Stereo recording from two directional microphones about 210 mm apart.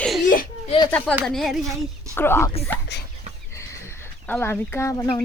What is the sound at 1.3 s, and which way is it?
A woman's voice, centre (ahead or behind).